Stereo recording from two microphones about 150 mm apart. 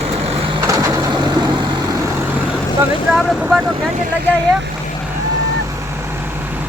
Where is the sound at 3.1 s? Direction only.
5° right (ahead or behind).